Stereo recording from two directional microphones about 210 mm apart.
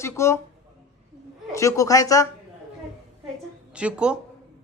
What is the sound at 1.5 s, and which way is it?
Speech, 15° left (ahead or behind).